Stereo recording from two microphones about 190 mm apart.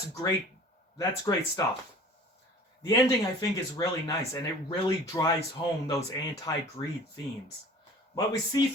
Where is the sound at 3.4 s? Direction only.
20° left (ahead or behind).